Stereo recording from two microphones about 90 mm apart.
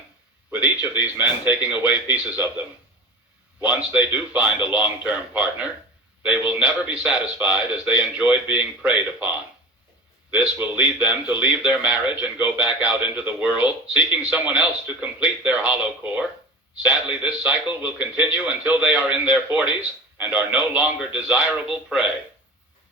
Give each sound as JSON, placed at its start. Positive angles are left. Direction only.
{"t": 0.5, "sound": "a man's voice", "side_deg": -15}
{"t": 10.3, "sound": "a man's voice", "side_deg": -15}